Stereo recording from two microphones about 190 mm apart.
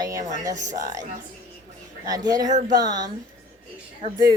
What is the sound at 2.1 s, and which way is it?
Speech, 20° right (ahead or behind).